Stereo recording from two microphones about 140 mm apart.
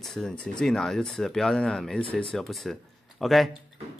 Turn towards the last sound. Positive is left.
turn(degrees=0)  # may be behind; listen again after turning